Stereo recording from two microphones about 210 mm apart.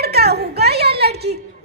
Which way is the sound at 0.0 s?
50° right (ahead or behind).